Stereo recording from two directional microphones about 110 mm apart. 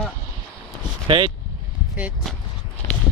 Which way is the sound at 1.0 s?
50° right (ahead or behind).